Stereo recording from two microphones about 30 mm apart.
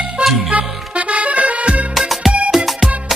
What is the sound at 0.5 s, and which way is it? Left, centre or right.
Music, right.